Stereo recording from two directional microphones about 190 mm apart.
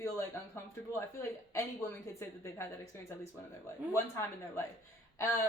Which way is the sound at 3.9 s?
15° left (ahead or behind).